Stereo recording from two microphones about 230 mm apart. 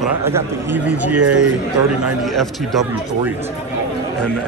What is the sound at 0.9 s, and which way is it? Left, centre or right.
Speech, right.